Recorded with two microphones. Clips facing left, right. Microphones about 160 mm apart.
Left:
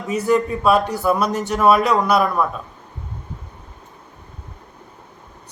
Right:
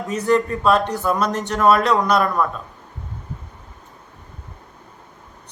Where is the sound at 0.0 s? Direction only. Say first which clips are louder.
Even; centre (ahead or behind).